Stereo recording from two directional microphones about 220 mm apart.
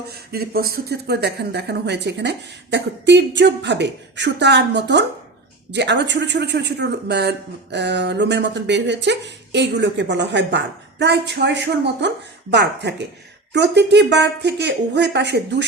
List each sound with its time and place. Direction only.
0.3 s speech: 45° right (ahead or behind)